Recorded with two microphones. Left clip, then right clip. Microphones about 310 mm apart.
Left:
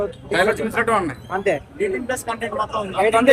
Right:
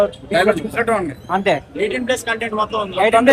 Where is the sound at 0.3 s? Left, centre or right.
Centre.